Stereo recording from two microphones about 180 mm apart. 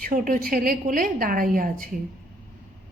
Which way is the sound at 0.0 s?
45° right (ahead or behind).